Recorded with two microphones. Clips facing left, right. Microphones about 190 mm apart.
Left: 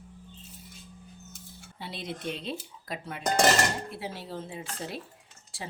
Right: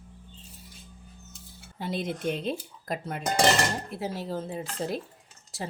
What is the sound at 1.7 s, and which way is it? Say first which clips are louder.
Speech: right 7 dB; 45° right (ahead or behind).